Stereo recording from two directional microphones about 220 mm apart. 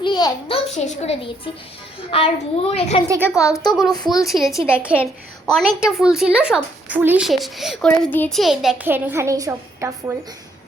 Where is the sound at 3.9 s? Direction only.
20° left (ahead or behind).